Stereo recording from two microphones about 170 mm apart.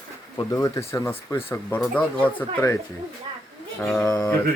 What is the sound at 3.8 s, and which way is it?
Speech, 5° left (ahead or behind).